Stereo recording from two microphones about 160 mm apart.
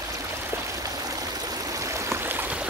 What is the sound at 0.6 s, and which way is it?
Stream, 20° right (ahead or behind).